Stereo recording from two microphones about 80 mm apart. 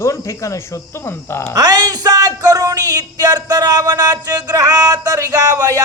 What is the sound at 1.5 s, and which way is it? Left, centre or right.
Speech, right.